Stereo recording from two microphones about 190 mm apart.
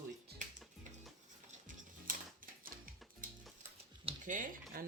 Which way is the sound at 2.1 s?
45° right (ahead or behind).